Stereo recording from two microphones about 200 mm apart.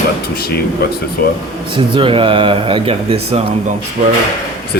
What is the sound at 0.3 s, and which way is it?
Speech, 50° left (ahead or behind).